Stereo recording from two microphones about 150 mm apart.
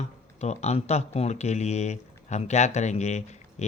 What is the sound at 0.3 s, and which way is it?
Speech, 45° left (ahead or behind).